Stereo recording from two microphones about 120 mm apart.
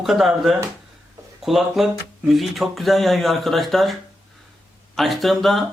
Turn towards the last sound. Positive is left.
turn(degrees=0)  # may be behind; listen again after turning